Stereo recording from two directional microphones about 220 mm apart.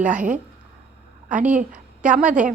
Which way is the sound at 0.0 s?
35° right (ahead or behind).